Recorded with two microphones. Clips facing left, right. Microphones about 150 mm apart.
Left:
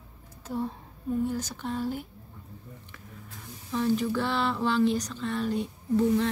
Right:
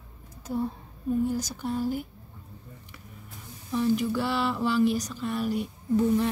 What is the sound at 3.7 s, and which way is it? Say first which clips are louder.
Speech: right 1 dB; 10° right (ahead or behind).